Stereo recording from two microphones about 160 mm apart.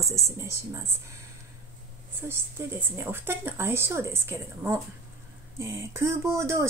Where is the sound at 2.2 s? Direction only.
15° right (ahead or behind).